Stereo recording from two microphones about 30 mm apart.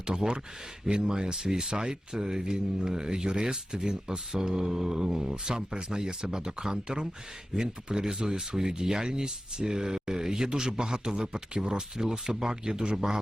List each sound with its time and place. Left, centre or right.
0.0 s speech: right